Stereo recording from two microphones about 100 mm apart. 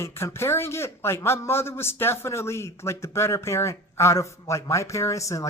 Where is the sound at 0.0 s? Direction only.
25° left (ahead or behind).